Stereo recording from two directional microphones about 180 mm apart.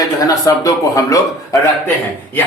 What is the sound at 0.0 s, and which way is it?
Speech, 20° left (ahead or behind).